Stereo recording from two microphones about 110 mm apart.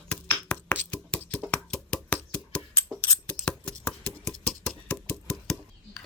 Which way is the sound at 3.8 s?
10° left (ahead or behind).